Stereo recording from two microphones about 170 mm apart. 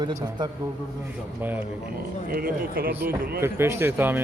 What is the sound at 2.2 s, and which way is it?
Speech, 60° right (ahead or behind).